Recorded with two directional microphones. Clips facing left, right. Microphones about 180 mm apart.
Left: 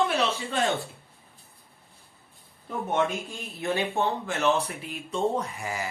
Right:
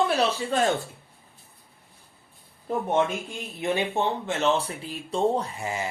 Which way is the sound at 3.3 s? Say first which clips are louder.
Right 5 dB; 15° right (ahead or behind).